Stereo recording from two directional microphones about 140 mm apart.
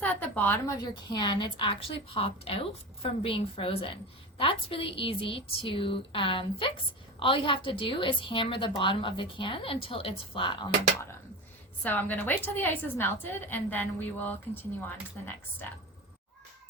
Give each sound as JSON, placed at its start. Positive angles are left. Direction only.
{"t": 0.0, "sound": "a sound", "side_deg": 10}
{"t": 1.1, "sound": "a woman's voice", "side_deg": 35}
{"t": 11.8, "sound": "a woman's voice", "side_deg": 10}